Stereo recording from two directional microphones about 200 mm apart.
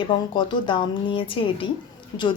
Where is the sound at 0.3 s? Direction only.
25° left (ahead or behind).